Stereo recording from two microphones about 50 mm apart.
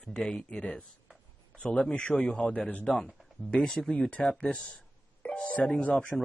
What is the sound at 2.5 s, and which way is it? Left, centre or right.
Speech, left.